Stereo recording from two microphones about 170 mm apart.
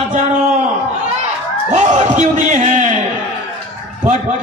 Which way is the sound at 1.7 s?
45° right (ahead or behind).